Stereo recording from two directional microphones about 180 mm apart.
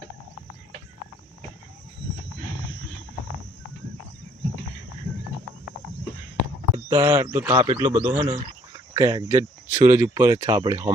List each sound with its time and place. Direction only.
6.7 s speech: 20° right (ahead or behind)
8.9 s speech: 20° right (ahead or behind)